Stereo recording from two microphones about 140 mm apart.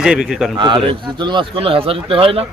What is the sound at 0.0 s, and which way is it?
Speech, 5° right (ahead or behind).